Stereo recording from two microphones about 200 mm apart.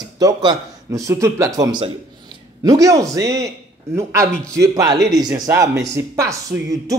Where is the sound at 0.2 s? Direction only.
20° right (ahead or behind).